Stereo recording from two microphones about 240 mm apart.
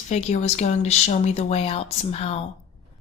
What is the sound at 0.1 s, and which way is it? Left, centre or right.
A woman's voice, left.